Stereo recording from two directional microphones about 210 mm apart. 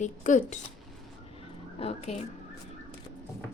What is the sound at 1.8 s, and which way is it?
Speech, 30° left (ahead or behind).